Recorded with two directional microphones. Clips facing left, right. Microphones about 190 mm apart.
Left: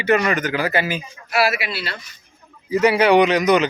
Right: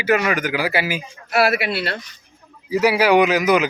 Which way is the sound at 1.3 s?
55° right (ahead or behind).